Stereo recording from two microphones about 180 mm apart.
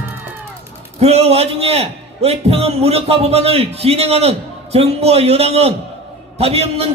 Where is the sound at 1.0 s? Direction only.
35° right (ahead or behind).